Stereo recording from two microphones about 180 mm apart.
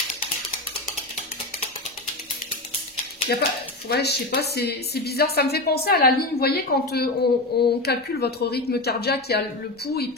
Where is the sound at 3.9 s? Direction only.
65° left (ahead or behind).